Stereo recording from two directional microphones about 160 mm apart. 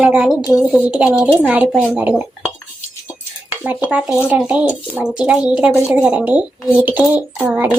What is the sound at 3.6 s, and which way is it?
A child's voice, 10° right (ahead or behind).